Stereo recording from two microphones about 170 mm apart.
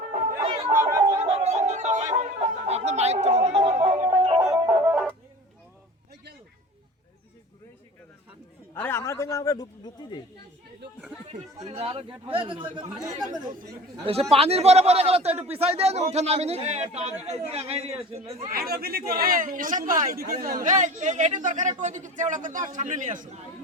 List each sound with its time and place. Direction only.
0.8 s a sound: 15° right (ahead or behind)
1.2 s music: 40° right (ahead or behind)
4.1 s music: 30° right (ahead or behind)
4.6 s music: 15° right (ahead or behind)
8.7 s a man's voice: 15° left (ahead or behind)
11.3 s a man's voice: 40° right (ahead or behind); by 13.2 s 20° right (ahead or behind)
14.0 s a man's voice: 35° right (ahead or behind)
18.5 s a man's voice: 65° right (ahead or behind)